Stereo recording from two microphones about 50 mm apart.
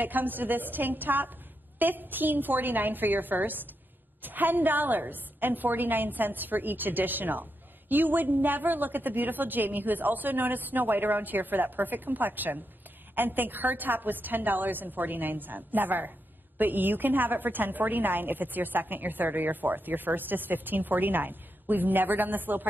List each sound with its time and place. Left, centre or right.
0.0 s a woman's voice: right